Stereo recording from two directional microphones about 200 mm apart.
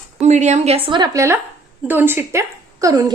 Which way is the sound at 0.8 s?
20° right (ahead or behind).